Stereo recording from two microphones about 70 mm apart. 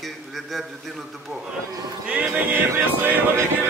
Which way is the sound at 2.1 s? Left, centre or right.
Right.